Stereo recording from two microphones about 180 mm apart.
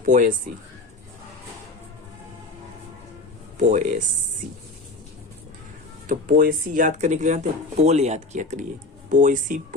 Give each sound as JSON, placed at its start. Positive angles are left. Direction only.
{"t": 0.0, "sound": "speech", "side_deg": -50}
{"t": 3.6, "sound": "speech", "side_deg": -40}
{"t": 6.1, "sound": "speech", "side_deg": -50}